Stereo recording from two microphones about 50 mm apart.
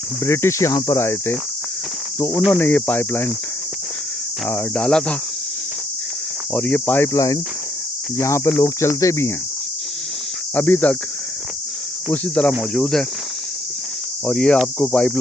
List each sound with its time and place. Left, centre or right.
0.3 s speech: left
2.5 s speech: left
4.7 s speech: centre
6.5 s speech: left
6.7 s speech: left
8.2 s speech: left
10.5 s speech: left
12.3 s speech: centre
12.7 s speech: centre
14.3 s speech: centre